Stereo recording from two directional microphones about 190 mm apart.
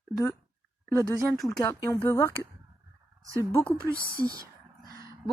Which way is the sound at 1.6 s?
15° left (ahead or behind).